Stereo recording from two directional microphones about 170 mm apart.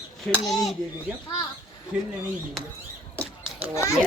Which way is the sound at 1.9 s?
5° right (ahead or behind).